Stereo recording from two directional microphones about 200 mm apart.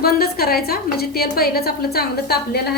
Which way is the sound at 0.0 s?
50° left (ahead or behind).